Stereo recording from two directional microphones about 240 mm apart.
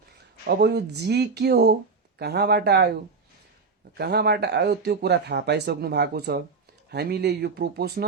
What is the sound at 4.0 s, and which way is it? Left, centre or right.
Speech, right.